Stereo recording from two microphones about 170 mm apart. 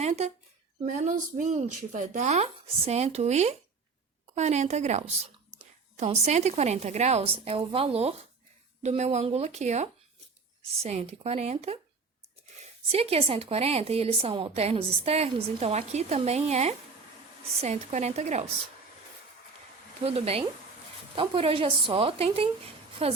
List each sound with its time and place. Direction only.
0.0 s a sound: 40° right (ahead or behind)
0.9 s a woman's voice: 45° right (ahead or behind)
12.9 s a woman's voice: 35° right (ahead or behind)
20.1 s a woman's voice: 35° right (ahead or behind)